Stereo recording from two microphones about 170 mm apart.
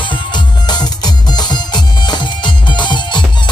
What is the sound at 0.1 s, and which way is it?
Music, 25° left (ahead or behind).